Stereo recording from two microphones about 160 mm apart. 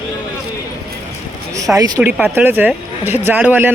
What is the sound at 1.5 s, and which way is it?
Speech, 20° right (ahead or behind).